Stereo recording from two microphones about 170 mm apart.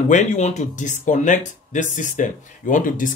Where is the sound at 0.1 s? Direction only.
45° left (ahead or behind).